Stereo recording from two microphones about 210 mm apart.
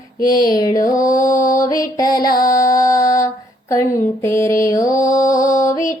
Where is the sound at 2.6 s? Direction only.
15° left (ahead or behind).